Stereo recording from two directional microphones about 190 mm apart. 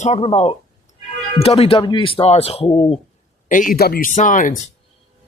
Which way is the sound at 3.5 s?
45° left (ahead or behind).